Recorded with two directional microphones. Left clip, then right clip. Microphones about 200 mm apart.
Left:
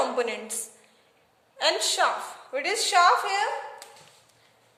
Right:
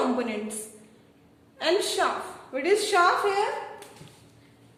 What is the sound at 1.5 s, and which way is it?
A woman's voice, 50° left (ahead or behind).